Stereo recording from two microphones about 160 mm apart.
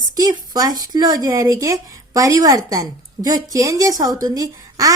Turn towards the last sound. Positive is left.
turn(degrees=-20)  # may be behind; listen again after turning